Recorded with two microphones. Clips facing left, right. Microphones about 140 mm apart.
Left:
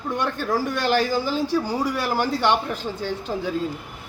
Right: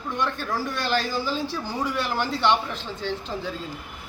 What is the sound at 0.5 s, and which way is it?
Speech, 50° left (ahead or behind).